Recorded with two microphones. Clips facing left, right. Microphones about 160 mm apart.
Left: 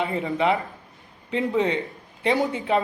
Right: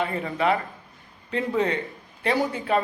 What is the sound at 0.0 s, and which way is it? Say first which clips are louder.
Speech: left 1 dB; 20° left (ahead or behind).